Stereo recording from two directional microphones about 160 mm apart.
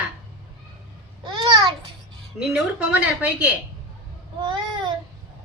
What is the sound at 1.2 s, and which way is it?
Babbling, 30° right (ahead or behind).